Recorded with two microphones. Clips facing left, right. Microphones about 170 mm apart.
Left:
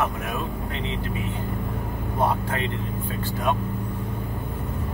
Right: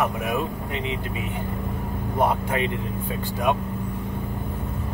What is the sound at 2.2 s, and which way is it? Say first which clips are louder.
Speech: right 2 dB; 15° right (ahead or behind).